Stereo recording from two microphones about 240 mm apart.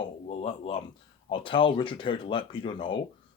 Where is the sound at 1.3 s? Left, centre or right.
Left.